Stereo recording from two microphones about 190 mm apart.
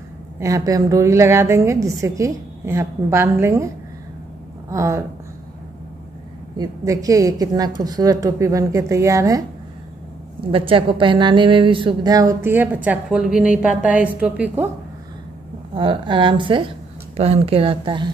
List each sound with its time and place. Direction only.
0.4 s a woman's voice: 20° right (ahead or behind)
6.5 s a woman's voice: 20° right (ahead or behind)
10.5 s a woman's voice: 30° right (ahead or behind); by 14.7 s 10° right (ahead or behind)
15.7 s a woman's voice: 25° right (ahead or behind)